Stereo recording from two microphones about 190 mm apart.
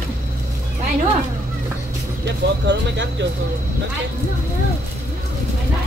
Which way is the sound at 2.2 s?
70° right (ahead or behind).